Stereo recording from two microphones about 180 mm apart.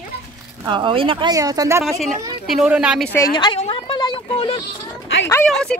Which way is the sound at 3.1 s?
20° left (ahead or behind).